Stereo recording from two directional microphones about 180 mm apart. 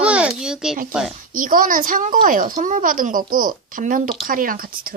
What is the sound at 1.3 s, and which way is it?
Speech, 50° right (ahead or behind).